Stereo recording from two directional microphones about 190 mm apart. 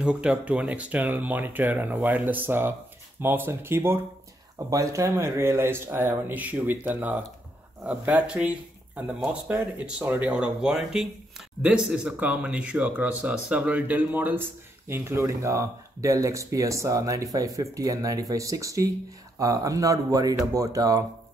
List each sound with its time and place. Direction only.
0.0 s speech: 5° right (ahead or behind)